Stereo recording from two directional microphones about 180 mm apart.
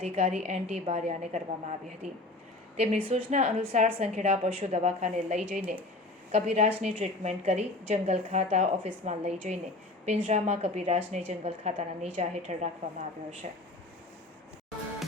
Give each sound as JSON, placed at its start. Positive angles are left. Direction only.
{"t": 0.0, "sound": "a woman's voice", "side_deg": -40}